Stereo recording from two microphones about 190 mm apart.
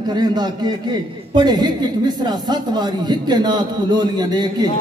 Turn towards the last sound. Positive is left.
turn(degrees=-20)  # may be behind; listen again after turning